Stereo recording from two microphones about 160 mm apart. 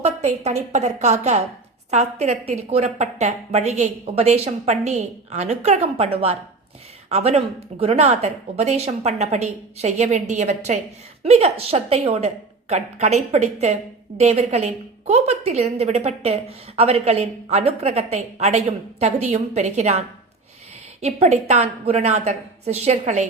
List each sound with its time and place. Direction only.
0.0 s a woman's voice: 45° right (ahead or behind)